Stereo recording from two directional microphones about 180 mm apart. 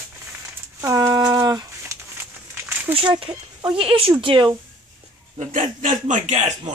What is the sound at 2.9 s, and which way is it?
Speech, 30° right (ahead or behind).